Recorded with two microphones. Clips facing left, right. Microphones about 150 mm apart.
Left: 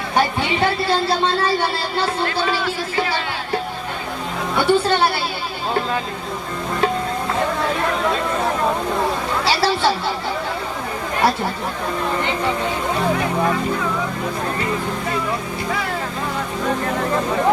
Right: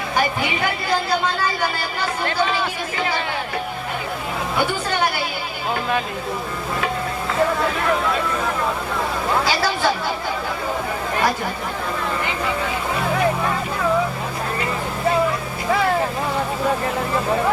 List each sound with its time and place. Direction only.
0.6 s a woman's voice: 30° left (ahead or behind)
4.5 s a woman's voice: 30° left (ahead or behind)
9.5 s a woman's voice: 30° left (ahead or behind)